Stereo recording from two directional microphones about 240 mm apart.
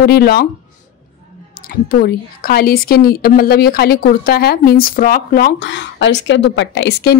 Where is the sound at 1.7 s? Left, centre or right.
Left.